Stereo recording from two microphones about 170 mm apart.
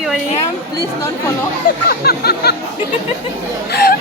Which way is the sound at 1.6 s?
55° left (ahead or behind).